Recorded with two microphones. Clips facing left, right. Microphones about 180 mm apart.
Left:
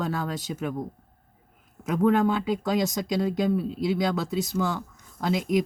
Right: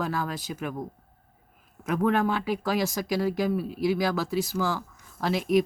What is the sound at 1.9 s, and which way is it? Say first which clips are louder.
Speech: left 3 dB; 25° left (ahead or behind).